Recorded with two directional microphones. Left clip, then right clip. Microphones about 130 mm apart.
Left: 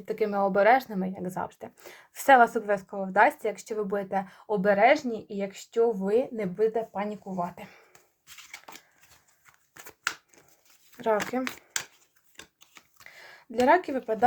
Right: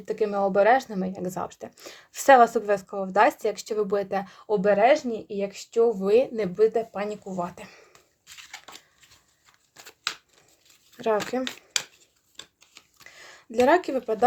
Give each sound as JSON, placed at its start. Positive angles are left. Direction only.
{"t": 0.0, "sound": "speech", "side_deg": -15}
{"t": 1.0, "sound": "speech", "side_deg": -30}
{"t": 6.1, "sound": "speech", "side_deg": -50}
{"t": 7.3, "sound": "speech", "side_deg": -30}
{"t": 10.9, "sound": "a sound", "side_deg": -25}
{"t": 13.1, "sound": "a sound", "side_deg": -25}
{"t": 13.7, "sound": "speech", "side_deg": -35}